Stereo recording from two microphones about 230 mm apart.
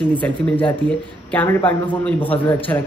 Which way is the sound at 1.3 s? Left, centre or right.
Centre.